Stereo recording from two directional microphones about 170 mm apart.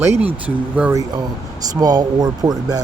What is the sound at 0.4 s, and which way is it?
Speech, 10° right (ahead or behind).